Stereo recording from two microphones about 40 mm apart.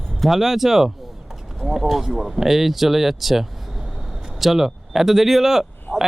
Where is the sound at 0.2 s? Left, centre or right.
Centre.